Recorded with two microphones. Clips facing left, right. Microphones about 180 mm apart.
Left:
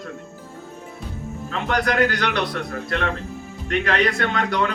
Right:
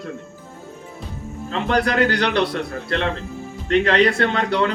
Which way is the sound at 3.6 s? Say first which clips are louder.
Right 5 dB; 30° right (ahead or behind).